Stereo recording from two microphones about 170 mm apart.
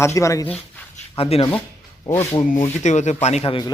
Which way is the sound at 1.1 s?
35° left (ahead or behind).